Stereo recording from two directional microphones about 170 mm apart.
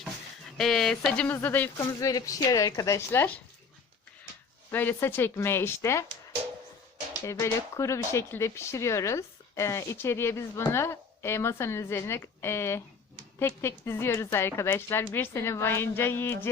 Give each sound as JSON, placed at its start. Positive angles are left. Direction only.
{"t": 0.0, "sound": "speech", "side_deg": 0}
{"t": 4.7, "sound": "speech", "side_deg": 10}
{"t": 7.3, "sound": "speech", "side_deg": 15}